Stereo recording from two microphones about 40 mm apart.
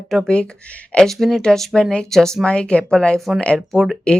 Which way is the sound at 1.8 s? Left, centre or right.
Left.